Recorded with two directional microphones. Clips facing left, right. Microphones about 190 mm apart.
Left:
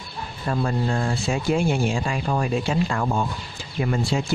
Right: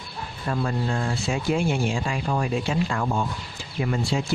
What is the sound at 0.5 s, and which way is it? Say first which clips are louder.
Speech: left 2 dB; 35° left (ahead or behind).